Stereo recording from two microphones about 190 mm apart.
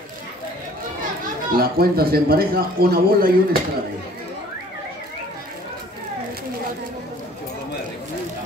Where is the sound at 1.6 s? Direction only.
55° right (ahead or behind).